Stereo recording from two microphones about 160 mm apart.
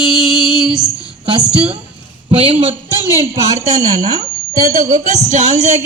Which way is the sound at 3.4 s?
20° right (ahead or behind).